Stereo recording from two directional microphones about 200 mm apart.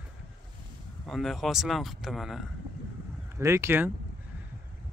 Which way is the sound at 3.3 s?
15° right (ahead or behind).